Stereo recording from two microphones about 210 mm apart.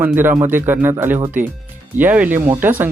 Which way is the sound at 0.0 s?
10° right (ahead or behind).